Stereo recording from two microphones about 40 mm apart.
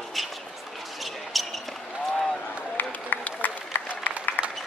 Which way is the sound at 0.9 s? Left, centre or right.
Centre.